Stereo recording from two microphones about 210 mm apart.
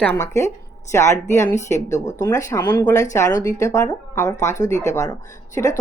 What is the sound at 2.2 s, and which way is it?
Speech, 15° left (ahead or behind).